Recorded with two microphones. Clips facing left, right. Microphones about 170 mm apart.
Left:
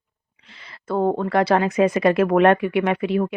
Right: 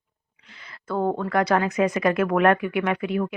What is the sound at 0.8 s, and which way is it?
Speech, 25° left (ahead or behind).